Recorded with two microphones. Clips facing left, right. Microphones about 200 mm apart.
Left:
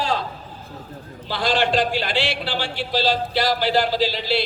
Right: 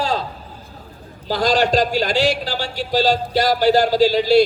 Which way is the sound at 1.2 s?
40° right (ahead or behind).